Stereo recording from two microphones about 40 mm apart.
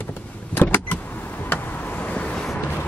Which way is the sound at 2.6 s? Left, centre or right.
Left.